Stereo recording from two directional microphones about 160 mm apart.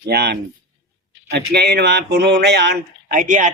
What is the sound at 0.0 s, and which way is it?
Speech, 90° right.